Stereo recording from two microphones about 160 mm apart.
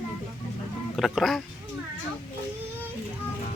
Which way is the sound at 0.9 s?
Centre (ahead or behind).